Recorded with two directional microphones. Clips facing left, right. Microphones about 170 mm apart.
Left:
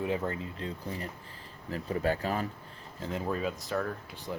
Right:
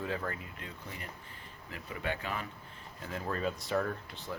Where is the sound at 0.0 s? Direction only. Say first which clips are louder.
Left 5 dB; 20° left (ahead or behind); by 2.5 s 40° left (ahead or behind).